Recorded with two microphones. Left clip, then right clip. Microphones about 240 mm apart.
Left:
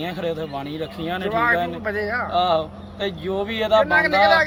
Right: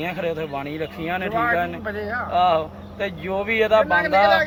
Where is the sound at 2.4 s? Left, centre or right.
Centre.